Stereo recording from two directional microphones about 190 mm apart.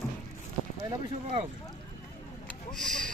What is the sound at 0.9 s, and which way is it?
Speech, 30° right (ahead or behind).